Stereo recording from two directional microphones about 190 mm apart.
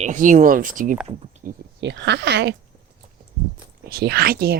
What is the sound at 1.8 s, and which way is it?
Speech, 65° right (ahead or behind).